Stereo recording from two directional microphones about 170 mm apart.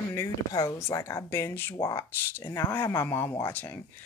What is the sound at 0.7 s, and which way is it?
Speech, 15° left (ahead or behind).